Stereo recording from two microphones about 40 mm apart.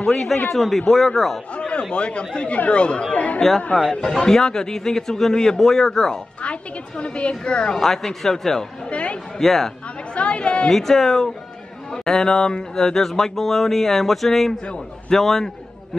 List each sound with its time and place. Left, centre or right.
0.0 s speech: centre
1.6 s speech: left
3.9 s speech: centre
6.4 s speech: left
7.7 s speech: centre
8.9 s a woman's voice: left
9.4 s speech: centre
10.1 s speech: left
10.7 s a man's voice: centre